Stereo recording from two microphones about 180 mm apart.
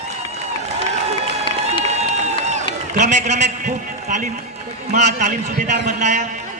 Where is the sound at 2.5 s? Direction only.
40° right (ahead or behind).